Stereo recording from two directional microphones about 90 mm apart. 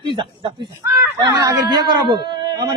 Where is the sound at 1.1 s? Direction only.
45° right (ahead or behind).